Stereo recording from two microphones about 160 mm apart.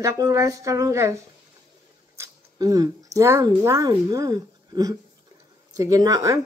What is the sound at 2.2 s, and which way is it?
Speech, 20° right (ahead or behind).